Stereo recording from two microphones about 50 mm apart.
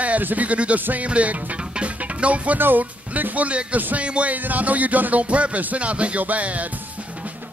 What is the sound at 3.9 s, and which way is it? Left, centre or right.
Music, right.